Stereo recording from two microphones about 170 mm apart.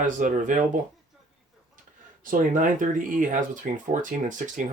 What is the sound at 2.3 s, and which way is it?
Speech, 50° right (ahead or behind).